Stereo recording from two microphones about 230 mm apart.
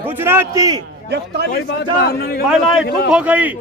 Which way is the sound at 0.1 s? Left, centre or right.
Centre.